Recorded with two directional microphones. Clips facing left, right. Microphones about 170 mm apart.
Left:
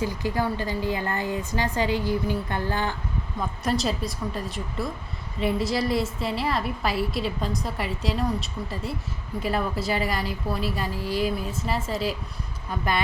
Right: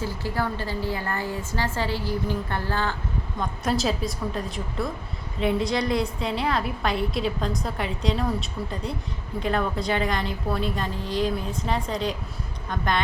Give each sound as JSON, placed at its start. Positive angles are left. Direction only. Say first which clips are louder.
{"t": 0.0, "sound": "a woman's voice", "louder": "left 2 dB", "side_deg": 15}
{"t": 3.4, "sound": "a woman's voice", "louder": "right 1 dB", "side_deg": 0}